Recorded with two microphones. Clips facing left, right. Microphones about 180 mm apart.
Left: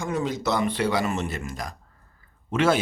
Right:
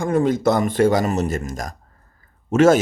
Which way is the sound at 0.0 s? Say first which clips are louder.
Right 9 dB; 50° right (ahead or behind).